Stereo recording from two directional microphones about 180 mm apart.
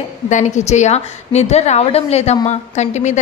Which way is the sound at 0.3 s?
40° left (ahead or behind).